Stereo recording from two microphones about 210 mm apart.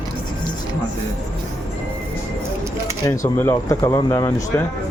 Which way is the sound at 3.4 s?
10° left (ahead or behind).